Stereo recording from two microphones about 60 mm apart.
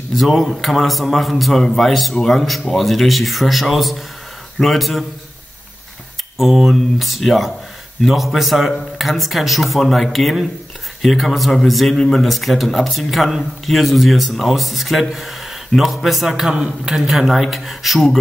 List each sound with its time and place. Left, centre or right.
0.1 s a man's voice: centre
6.3 s a man's voice: centre